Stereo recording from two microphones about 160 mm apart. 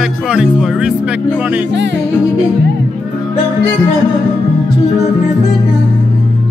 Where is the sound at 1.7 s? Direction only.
90° right.